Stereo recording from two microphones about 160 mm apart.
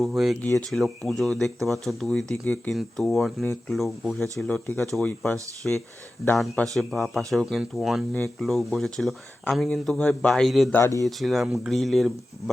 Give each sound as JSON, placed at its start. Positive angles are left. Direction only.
{"t": 0.2, "sound": "speech", "side_deg": 0}
{"t": 10.8, "sound": "speech", "side_deg": 15}
{"t": 11.0, "sound": "speech", "side_deg": 0}